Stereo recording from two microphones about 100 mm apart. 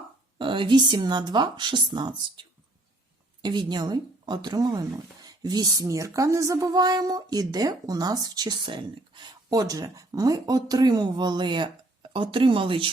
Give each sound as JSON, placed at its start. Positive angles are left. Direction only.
{"t": 0.3, "sound": "speech", "side_deg": -55}
{"t": 9.5, "sound": "speech", "side_deg": -40}